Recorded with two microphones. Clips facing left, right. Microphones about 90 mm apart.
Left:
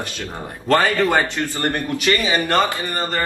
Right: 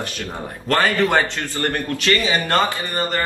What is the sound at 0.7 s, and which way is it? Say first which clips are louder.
A man's voice: left 1 dB; 20° left (ahead or behind).